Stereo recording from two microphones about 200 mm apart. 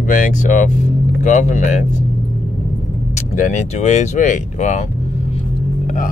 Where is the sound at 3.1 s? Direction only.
40° left (ahead or behind).